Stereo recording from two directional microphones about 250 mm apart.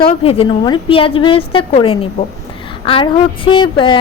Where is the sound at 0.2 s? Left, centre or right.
Left.